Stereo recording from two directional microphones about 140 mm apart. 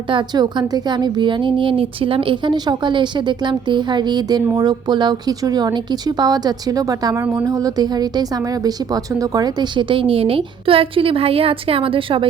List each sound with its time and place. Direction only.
0.1 s speech: 35° right (ahead or behind)